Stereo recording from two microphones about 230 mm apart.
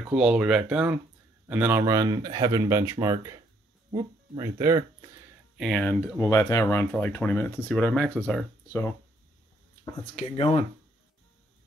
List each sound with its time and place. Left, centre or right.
0.1 s speech: centre
5.6 s speech: centre
10.1 s speech: left